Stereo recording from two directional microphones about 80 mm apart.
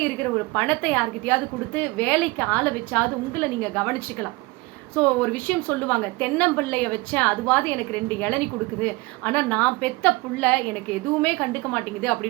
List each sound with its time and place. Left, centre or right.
0.2 s a woman's voice: centre